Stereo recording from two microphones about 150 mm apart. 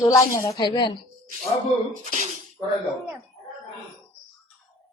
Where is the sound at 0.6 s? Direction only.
30° left (ahead or behind).